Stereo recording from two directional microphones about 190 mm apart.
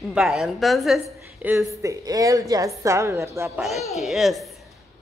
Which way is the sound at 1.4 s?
15° right (ahead or behind).